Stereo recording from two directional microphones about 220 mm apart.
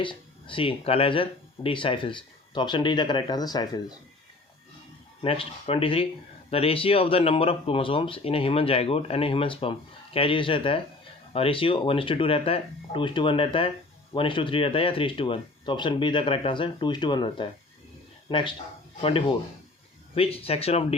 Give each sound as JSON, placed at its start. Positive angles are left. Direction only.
{"t": 0.0, "sound": "speech", "side_deg": 20}
{"t": 5.2, "sound": "speech", "side_deg": 25}
{"t": 20.1, "sound": "speech", "side_deg": 25}